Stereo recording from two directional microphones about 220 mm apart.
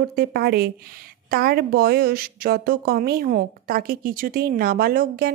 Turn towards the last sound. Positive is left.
turn(degrees=-40)  # may be behind; listen again after turning